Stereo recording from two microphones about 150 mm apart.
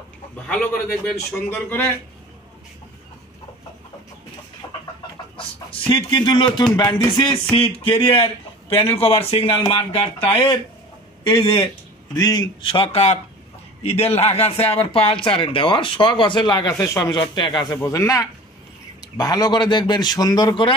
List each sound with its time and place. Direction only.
0.5 s a man's voice: 5° left (ahead or behind)
5.7 s a man's voice: 35° left (ahead or behind)